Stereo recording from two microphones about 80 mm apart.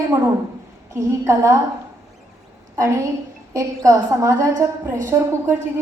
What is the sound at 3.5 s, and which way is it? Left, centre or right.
A woman's voice, right.